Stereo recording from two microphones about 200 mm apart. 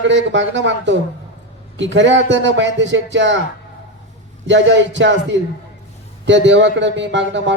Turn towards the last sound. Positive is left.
turn(degrees=-65)  # may be behind; listen again after turning